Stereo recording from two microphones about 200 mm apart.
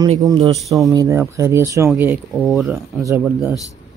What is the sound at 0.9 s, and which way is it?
Speech, 15° right (ahead or behind).